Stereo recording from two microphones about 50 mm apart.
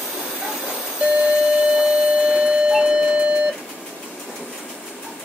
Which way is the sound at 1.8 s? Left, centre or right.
Centre.